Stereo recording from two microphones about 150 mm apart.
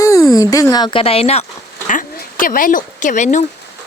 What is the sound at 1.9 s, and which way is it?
Speech, 65° left (ahead or behind).